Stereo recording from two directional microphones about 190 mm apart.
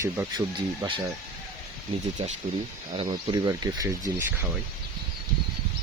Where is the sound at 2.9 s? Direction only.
30° right (ahead or behind).